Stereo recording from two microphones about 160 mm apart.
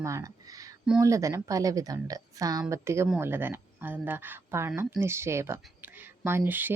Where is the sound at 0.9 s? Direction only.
20° right (ahead or behind).